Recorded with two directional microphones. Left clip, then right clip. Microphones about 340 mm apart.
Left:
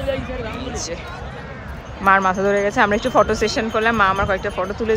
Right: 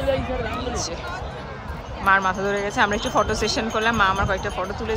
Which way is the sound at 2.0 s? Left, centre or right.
Centre.